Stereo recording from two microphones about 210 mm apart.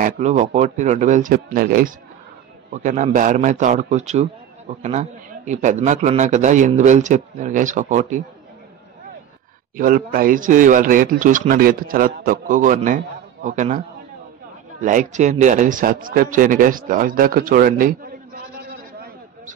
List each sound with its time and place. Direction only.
0.0 s speech: 35° right (ahead or behind)
9.8 s a man's voice: 40° right (ahead or behind)